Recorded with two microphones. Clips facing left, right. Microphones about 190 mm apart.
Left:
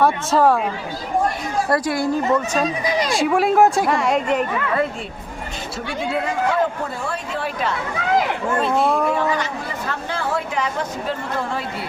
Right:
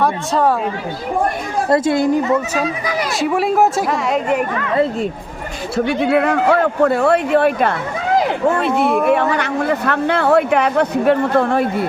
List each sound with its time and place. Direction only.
0.0 s speech: centre (ahead or behind)
1.7 s a woman's voice: 25° right (ahead or behind)
3.2 s speech: centre (ahead or behind)
5.9 s a man's voice: 65° right (ahead or behind)
9.0 s a man's voice: 65° right (ahead or behind)